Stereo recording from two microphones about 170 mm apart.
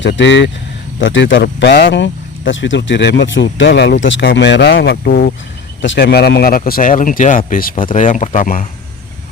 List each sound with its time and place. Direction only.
0.0 s speech: 90° left; by 5.3 s 65° left (ahead or behind)
5.8 s speech: 85° left; by 8.6 s 50° left (ahead or behind)